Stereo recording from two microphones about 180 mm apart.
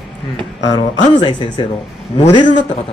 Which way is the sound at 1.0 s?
25° left (ahead or behind).